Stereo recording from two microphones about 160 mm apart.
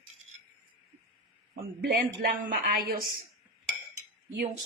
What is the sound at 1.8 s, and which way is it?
A woman's voice, 65° right (ahead or behind).